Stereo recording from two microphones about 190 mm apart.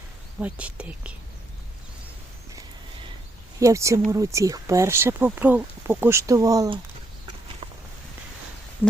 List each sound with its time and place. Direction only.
0.4 s speech: 5° right (ahead or behind)
3.6 s speech: 15° right (ahead or behind)
7.6 s vehicle: 30° right (ahead or behind)
8.8 s speech: 10° left (ahead or behind)